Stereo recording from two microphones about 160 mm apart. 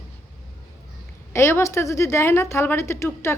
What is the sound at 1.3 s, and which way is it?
A woman's voice, 15° left (ahead or behind).